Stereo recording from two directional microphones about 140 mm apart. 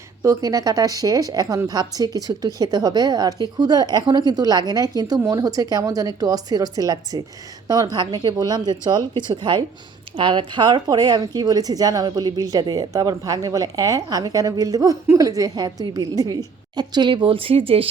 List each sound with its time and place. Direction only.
0.2 s a woman's voice: 25° right (ahead or behind); by 17.8 s 40° right (ahead or behind)